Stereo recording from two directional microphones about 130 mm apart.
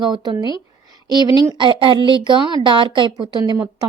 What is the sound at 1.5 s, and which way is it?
Speech, 40° right (ahead or behind).